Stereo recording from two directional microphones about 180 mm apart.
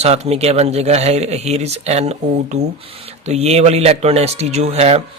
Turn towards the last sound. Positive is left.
turn(degrees=-35)  # may be behind; listen again after turning